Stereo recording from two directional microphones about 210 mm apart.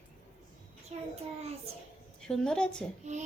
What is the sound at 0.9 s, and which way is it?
Child singing, 30° right (ahead or behind).